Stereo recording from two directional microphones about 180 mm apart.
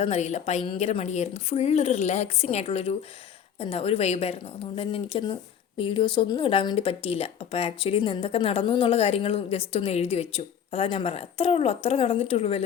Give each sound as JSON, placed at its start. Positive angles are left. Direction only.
{"t": 0.0, "sound": "a woman's voice", "side_deg": 40}